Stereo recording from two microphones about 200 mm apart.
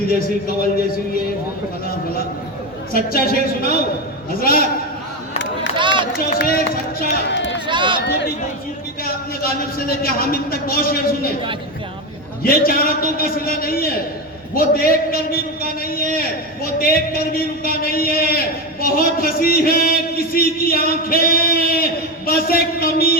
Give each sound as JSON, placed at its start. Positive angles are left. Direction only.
{"t": 2.9, "sound": "a man's voice", "side_deg": 45}
{"t": 5.7, "sound": "run", "side_deg": -25}
{"t": 6.4, "sound": "a man's voice", "side_deg": 50}
{"t": 7.3, "sound": "run", "side_deg": 60}
{"t": 7.7, "sound": "run", "side_deg": -25}
{"t": 9.0, "sound": "a man's voice", "side_deg": 45}
{"t": 12.4, "sound": "a man's voice", "side_deg": 45}